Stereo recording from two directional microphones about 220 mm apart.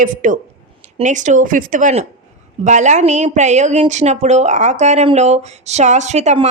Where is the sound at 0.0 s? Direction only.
35° right (ahead or behind).